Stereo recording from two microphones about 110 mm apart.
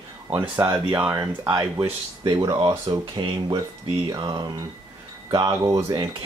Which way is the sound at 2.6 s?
40° right (ahead or behind).